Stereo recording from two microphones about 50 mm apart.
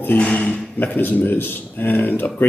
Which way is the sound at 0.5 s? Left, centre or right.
Left.